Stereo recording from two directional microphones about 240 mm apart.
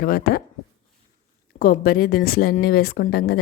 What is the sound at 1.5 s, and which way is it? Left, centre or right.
A woman's voice, left.